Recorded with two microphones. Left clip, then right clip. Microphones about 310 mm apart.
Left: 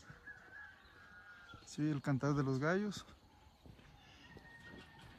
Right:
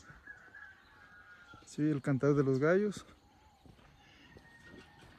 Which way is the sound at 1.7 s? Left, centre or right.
Centre.